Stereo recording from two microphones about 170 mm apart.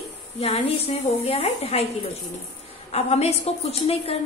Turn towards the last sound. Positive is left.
turn(degrees=35)  # may be behind; listen again after turning